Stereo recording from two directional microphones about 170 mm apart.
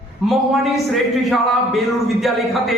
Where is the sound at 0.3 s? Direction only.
Centre (ahead or behind).